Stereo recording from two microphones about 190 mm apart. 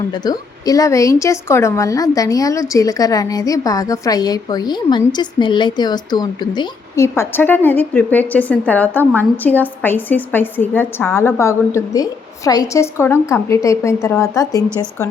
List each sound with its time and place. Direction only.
0.1 s a woman's voice: 20° left (ahead or behind)